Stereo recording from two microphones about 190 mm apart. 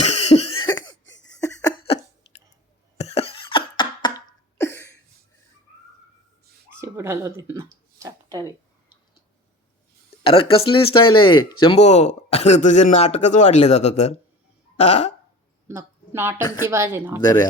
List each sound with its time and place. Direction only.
0.0 s cough: 35° left (ahead or behind)
1.4 s laughter: 15° left (ahead or behind)
3.0 s beatboxing: 35° left (ahead or behind)
4.6 s a sound: 15° left (ahead or behind)
6.7 s a sound: 15° right (ahead or behind)
10.2 s speech: 30° left (ahead or behind)
15.6 s a sound: 10° right (ahead or behind)
16.7 s speech: 10° right (ahead or behind)
17.2 s speech: 20° left (ahead or behind)